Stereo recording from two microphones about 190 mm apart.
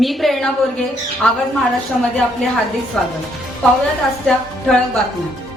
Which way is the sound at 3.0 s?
5° left (ahead or behind).